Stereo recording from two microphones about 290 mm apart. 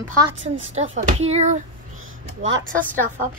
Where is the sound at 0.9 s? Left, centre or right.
Right.